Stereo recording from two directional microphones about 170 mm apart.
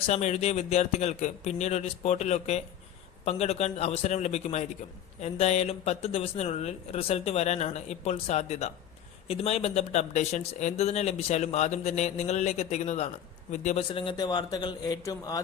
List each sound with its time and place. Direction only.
0.1 s a man's voice: 40° left (ahead or behind); by 15.4 s 20° left (ahead or behind)